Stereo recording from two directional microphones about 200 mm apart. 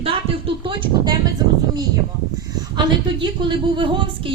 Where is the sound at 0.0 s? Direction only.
25° right (ahead or behind).